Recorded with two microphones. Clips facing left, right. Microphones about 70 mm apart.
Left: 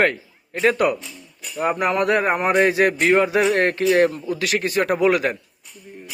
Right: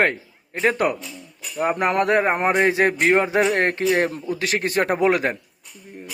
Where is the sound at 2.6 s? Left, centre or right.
Right.